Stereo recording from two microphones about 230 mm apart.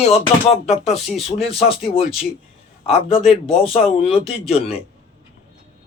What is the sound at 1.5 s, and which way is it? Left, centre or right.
Speech, left.